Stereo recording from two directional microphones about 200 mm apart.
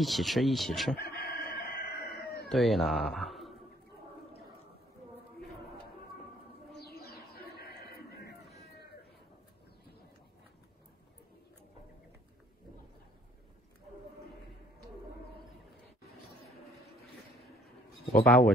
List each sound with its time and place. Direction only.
0.0 s speech: centre (ahead or behind)
0.9 s chicken: 50° left (ahead or behind)
2.4 s speech: centre (ahead or behind)
6.8 s bird: 50° left (ahead or behind)
18.2 s speech: 5° left (ahead or behind)